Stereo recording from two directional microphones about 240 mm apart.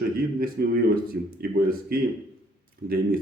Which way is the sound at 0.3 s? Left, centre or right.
Right.